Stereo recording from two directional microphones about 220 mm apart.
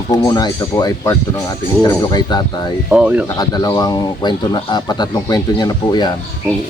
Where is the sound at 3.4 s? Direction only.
20° left (ahead or behind).